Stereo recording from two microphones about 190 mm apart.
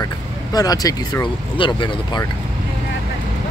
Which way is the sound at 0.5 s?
20° left (ahead or behind).